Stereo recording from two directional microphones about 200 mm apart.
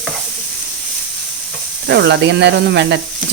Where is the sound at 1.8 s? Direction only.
60° right (ahead or behind).